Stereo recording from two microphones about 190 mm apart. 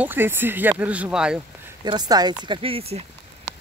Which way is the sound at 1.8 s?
20° right (ahead or behind).